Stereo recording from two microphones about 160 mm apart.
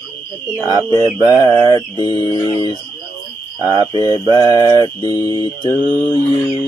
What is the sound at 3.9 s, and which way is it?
Mantra, 25° left (ahead or behind).